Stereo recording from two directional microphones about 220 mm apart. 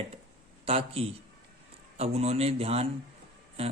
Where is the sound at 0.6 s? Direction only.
25° right (ahead or behind).